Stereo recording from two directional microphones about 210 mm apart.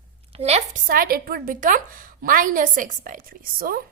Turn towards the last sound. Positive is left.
turn(degrees=-45)  # may be behind; listen again after turning